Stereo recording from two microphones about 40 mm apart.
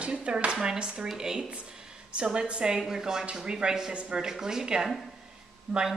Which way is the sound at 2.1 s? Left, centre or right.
Right.